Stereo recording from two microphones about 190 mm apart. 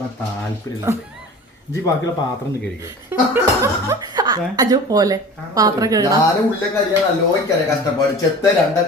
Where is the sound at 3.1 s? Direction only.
10° right (ahead or behind).